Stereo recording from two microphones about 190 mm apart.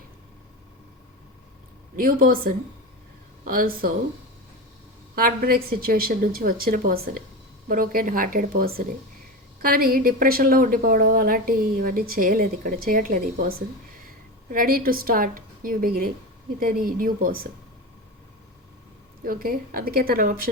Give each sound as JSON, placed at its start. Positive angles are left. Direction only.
{"t": 2.0, "sound": "a woman's voice", "side_deg": -50}
{"t": 5.1, "sound": "a woman's voice", "side_deg": -50}
{"t": 19.2, "sound": "a woman's voice", "side_deg": -50}